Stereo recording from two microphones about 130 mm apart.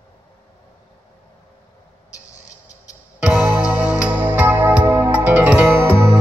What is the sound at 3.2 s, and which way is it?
Music, 10° right (ahead or behind).